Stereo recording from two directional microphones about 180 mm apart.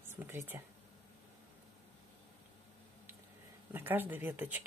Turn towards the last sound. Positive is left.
turn(degrees=-10)  # may be behind; listen again after turning